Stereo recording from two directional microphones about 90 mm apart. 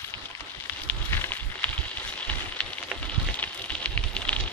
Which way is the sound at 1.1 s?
25° left (ahead or behind).